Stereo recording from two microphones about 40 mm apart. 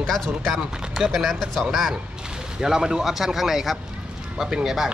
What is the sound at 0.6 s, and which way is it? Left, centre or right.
Speech, centre.